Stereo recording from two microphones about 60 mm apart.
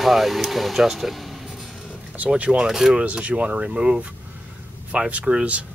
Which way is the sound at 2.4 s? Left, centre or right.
Right.